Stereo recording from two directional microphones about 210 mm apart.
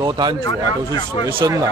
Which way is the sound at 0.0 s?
20° right (ahead or behind).